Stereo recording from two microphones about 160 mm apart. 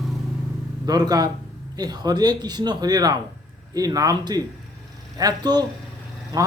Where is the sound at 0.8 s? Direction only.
25° right (ahead or behind).